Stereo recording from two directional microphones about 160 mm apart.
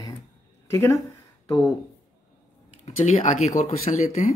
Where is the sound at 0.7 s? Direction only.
20° left (ahead or behind).